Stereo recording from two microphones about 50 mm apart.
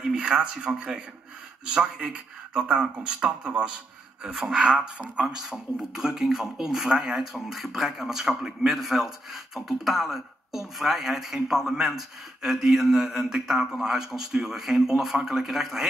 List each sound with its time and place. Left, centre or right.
0.0 s a man's voice: centre
4.3 s a man's voice: centre
4.6 s a man's voice: right